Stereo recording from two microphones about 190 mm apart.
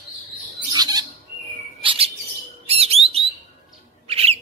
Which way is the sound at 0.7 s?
20° right (ahead or behind).